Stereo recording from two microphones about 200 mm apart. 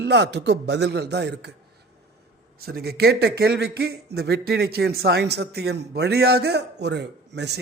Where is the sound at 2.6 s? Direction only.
50° right (ahead or behind).